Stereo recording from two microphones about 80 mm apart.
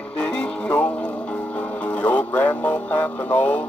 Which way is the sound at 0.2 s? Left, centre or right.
Centre.